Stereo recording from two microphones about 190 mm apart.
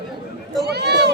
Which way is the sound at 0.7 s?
60° right (ahead or behind).